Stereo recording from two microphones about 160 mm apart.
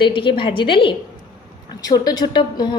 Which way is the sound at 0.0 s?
30° left (ahead or behind).